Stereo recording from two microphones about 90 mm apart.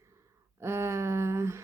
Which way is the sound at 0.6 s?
30° right (ahead or behind).